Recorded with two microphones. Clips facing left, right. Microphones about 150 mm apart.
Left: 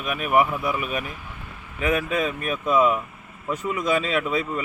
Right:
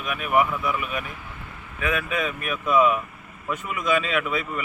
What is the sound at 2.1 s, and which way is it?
A man's voice, 35° left (ahead or behind).